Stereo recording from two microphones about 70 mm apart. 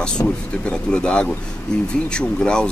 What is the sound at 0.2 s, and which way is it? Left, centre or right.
Speech, left.